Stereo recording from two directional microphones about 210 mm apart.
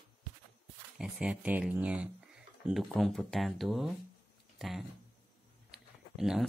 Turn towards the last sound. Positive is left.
turn(degrees=0)  # may be behind; listen again after turning